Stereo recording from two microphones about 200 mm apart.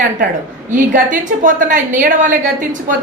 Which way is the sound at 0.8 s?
40° right (ahead or behind).